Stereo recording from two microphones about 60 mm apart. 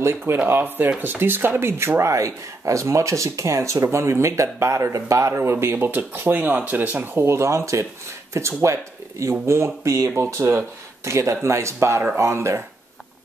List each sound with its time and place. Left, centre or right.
0.0 s speech: right
7.2 s speech: right